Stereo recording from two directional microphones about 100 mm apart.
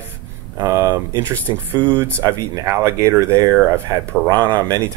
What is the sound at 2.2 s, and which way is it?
Speech, 40° right (ahead or behind).